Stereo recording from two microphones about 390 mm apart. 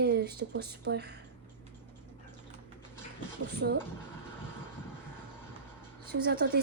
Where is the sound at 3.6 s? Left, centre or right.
Right.